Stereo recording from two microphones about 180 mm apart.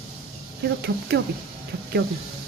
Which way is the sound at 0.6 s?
65° right (ahead or behind).